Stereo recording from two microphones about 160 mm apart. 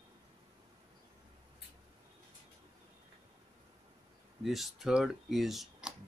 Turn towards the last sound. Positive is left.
turn(degrees=0)  # may be behind; listen again after turning